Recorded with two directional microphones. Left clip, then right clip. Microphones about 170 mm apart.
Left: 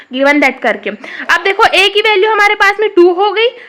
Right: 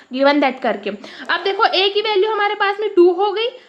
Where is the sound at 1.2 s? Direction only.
20° left (ahead or behind).